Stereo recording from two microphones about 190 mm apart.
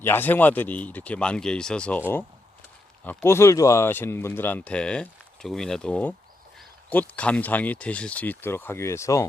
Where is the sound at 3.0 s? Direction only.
10° left (ahead or behind).